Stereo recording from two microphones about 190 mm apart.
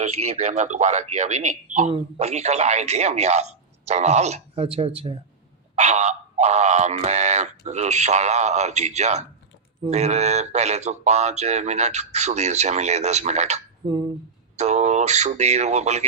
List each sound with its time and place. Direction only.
0.0 s speech: 35° right (ahead or behind)
13.8 s speech: 25° right (ahead or behind)
14.5 s speech: 35° right (ahead or behind)